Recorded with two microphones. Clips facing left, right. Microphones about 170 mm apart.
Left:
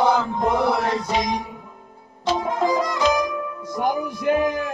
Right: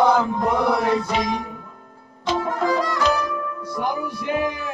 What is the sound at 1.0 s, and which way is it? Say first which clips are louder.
Music: even; 15° left (ahead or behind).